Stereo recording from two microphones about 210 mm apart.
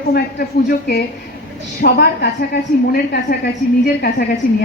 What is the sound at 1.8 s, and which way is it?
A man's voice, 45° left (ahead or behind).